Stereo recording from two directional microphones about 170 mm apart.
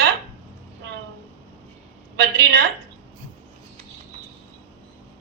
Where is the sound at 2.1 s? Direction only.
70° right (ahead or behind).